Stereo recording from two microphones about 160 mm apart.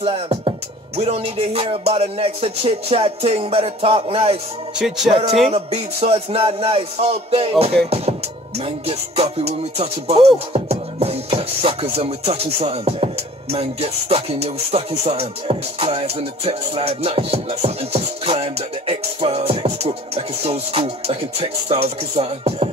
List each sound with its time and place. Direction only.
0.0 s music: 40° right (ahead or behind)
4.7 s speech: 5° right (ahead or behind)
5.5 s music: 40° right (ahead or behind)